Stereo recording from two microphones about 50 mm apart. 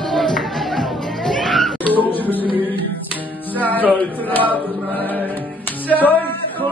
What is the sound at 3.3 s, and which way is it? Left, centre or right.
Music, left.